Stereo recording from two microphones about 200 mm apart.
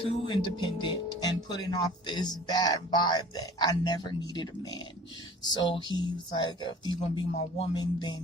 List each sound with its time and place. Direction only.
0.3 s speech: 25° left (ahead or behind)